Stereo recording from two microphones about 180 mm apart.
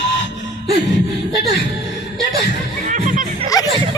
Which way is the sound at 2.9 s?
45° right (ahead or behind).